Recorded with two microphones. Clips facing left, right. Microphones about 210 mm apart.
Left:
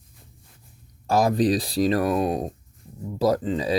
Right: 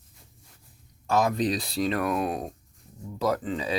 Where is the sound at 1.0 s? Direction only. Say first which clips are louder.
Left 4 dB; 35° left (ahead or behind).